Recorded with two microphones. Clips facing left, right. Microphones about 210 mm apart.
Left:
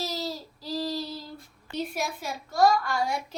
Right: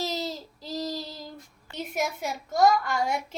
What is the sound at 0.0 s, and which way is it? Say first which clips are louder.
Child singing: right 1 dB; 20° right (ahead or behind).